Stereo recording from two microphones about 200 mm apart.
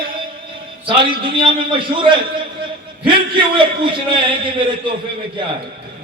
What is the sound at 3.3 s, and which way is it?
A man's voice, 25° right (ahead or behind).